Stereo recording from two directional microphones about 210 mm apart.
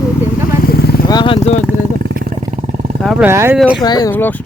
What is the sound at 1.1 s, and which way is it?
Speech, 25° left (ahead or behind).